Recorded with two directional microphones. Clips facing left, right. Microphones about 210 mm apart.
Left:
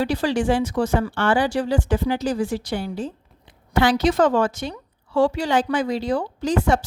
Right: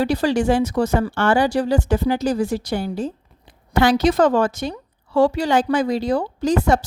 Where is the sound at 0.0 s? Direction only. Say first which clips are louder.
Right 3 dB; 40° right (ahead or behind).